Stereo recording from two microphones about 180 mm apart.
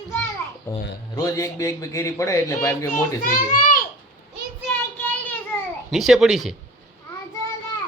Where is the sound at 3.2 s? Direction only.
45° left (ahead or behind).